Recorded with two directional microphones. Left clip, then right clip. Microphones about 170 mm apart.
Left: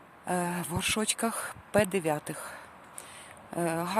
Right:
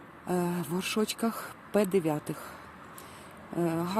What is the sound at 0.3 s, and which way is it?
Speech, 15° left (ahead or behind).